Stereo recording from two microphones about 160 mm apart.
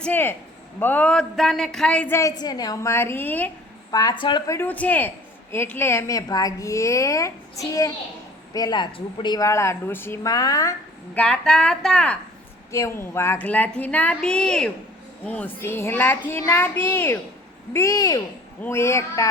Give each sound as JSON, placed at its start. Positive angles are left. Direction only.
{"t": 0.0, "sound": "a woman's voice", "side_deg": 10}
{"t": 2.4, "sound": "a woman's voice", "side_deg": 25}
{"t": 3.9, "sound": "a woman's voice", "side_deg": 25}
{"t": 4.4, "sound": "a woman's voice", "side_deg": 15}
{"t": 11.1, "sound": "a man's voice", "side_deg": 5}
{"t": 12.7, "sound": "a woman's voice", "side_deg": 15}